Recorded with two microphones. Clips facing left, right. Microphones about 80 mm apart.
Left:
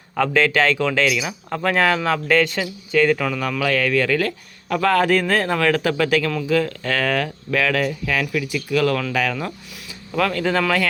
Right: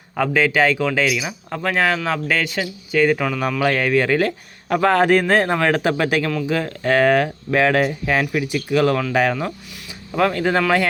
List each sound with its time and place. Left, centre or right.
0.2 s speech: centre
3.6 s a man's voice: right